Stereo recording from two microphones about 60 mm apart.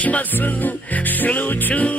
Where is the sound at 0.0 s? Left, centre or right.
Left.